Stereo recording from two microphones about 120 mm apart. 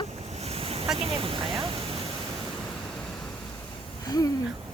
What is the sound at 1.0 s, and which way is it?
Speech, 50° right (ahead or behind).